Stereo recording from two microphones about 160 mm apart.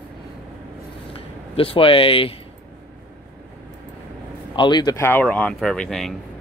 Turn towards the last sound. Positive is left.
turn(degrees=0)  # may be behind; listen again after turning